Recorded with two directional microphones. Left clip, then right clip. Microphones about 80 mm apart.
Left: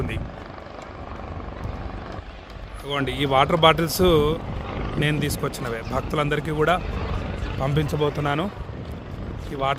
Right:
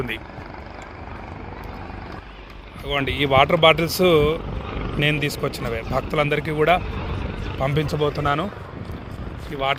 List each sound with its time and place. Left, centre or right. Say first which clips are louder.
2.8 s speech: right 3 dB; left